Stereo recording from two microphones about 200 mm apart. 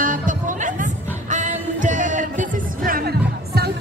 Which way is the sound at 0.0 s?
40° right (ahead or behind).